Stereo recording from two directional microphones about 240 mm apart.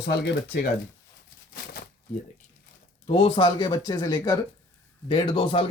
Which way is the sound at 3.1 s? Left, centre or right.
Left.